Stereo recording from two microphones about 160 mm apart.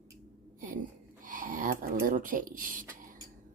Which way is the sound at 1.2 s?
55° right (ahead or behind).